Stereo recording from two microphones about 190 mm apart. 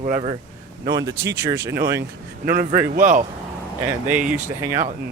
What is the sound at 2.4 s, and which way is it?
Speech, 40° right (ahead or behind).